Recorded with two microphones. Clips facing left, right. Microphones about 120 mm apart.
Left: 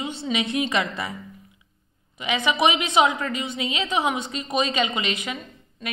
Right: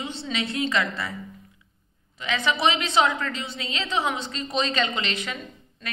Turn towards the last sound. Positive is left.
turn(degrees=15)  # may be behind; listen again after turning